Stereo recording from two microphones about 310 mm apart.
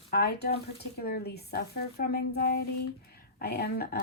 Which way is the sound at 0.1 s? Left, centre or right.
Left.